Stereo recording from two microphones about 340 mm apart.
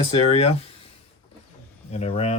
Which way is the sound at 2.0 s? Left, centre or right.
Centre.